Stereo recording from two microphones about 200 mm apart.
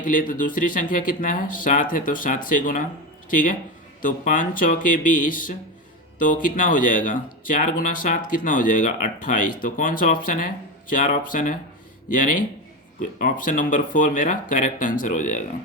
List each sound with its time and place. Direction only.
0.0 s speech: 40° left (ahead or behind)